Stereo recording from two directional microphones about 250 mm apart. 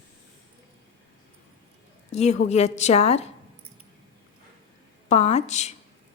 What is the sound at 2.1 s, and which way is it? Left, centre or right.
A woman's voice, left.